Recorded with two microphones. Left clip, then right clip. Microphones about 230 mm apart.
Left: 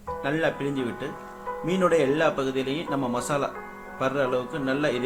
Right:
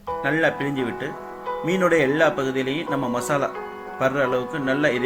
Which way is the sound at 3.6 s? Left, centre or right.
Right.